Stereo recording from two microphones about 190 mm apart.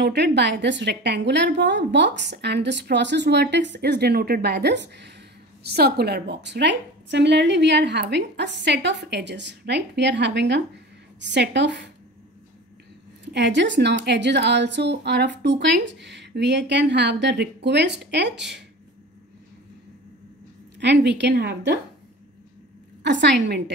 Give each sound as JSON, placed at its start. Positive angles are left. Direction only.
{"t": 0.0, "sound": "a woman's voice", "side_deg": -65}
{"t": 13.2, "sound": "a woman's voice", "side_deg": -65}
{"t": 20.8, "sound": "a woman's voice", "side_deg": -65}
{"t": 23.0, "sound": "a woman's voice", "side_deg": -65}